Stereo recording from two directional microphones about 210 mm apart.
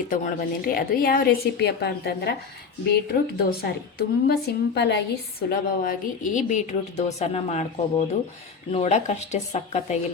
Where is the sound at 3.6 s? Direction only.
50° left (ahead or behind).